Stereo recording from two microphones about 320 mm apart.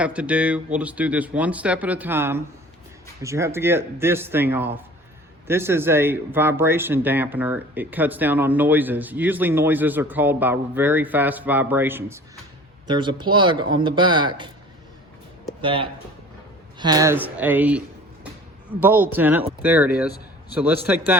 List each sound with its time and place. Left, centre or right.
0.0 s speech: centre
15.6 s speech: centre